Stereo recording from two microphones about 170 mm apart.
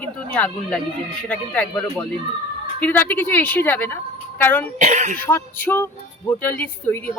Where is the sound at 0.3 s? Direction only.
10° left (ahead or behind).